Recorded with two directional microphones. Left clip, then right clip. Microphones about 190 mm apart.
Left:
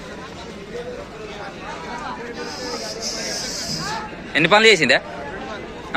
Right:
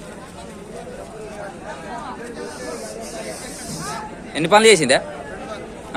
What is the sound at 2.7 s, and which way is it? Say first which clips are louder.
Snake: left 3 dB; 5° right (ahead or behind).